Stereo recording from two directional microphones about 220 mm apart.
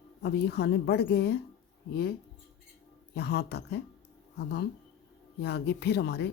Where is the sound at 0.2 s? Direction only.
50° left (ahead or behind).